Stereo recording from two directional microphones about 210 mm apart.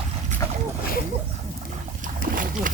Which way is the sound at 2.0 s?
40° right (ahead or behind).